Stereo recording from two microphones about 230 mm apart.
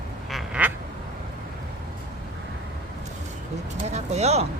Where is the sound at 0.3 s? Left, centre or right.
Centre.